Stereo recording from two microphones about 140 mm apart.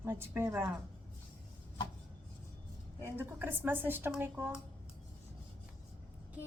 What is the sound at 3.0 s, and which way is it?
A woman's voice, 15° right (ahead or behind).